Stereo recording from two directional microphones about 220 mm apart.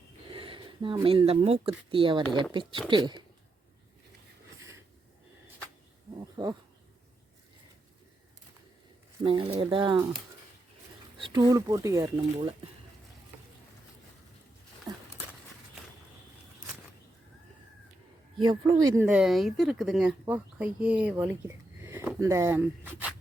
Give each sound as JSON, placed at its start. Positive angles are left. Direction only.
{"t": 0.3, "sound": "sniff", "side_deg": -25}
{"t": 1.0, "sound": "speech", "side_deg": -25}
{"t": 6.3, "sound": "bee", "side_deg": -20}
{"t": 9.2, "sound": "speech", "side_deg": -25}
{"t": 11.2, "sound": "speech", "side_deg": -20}
{"t": 14.9, "sound": "a sound", "side_deg": -20}
{"t": 18.4, "sound": "speech", "side_deg": -15}